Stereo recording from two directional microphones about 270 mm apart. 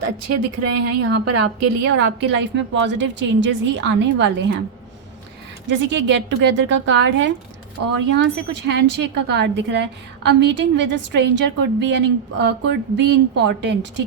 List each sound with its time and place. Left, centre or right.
0.6 s a woman's voice: right
2.0 s a woman's voice: right
5.6 s a woman's voice: right
7.8 s a woman's voice: right
8.1 s a woman's voice: right